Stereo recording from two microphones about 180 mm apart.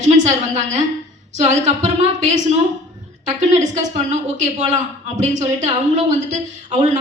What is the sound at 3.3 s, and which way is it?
A woman's voice, 40° right (ahead or behind).